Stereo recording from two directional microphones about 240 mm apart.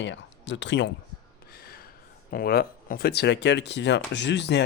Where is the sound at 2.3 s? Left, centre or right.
Left.